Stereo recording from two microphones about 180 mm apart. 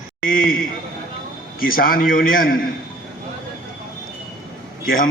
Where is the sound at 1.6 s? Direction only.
55° left (ahead or behind).